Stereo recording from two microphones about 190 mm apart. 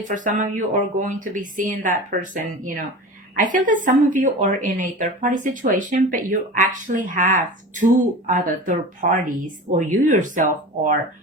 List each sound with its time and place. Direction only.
0.1 s speech: 40° right (ahead or behind)